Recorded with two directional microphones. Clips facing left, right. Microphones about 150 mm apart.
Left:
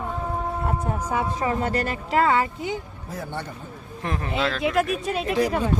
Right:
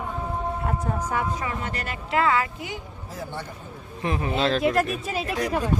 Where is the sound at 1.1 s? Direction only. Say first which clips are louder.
Left 3 dB; 30° left (ahead or behind).